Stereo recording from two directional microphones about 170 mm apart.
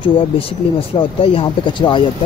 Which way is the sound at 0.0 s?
30° left (ahead or behind).